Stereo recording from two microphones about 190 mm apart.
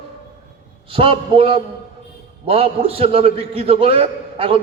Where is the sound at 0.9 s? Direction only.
30° right (ahead or behind).